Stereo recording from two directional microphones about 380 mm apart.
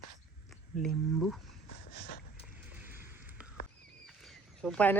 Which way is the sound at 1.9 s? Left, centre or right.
Left.